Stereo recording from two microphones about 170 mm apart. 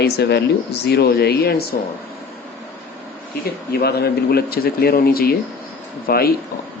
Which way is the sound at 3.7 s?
70° left (ahead or behind).